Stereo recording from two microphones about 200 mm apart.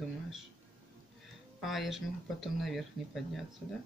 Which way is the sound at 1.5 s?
Centre (ahead or behind).